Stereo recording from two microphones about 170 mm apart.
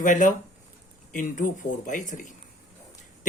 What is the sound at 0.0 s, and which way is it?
Speech, 50° left (ahead or behind).